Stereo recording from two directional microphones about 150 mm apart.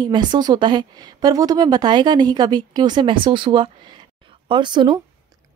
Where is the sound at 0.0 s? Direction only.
30° right (ahead or behind).